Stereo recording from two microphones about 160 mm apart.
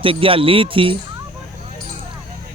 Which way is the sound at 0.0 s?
35° right (ahead or behind).